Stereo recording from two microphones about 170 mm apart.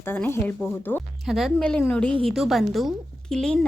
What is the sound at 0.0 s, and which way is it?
A woman's voice, 15° left (ahead or behind).